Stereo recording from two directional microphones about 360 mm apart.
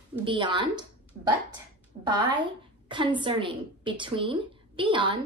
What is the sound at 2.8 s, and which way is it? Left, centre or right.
A woman's voice, centre.